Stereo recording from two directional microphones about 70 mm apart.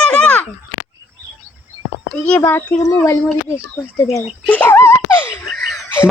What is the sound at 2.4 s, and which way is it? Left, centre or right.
Speech, left.